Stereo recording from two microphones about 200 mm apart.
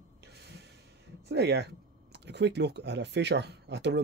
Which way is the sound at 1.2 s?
55° right (ahead or behind).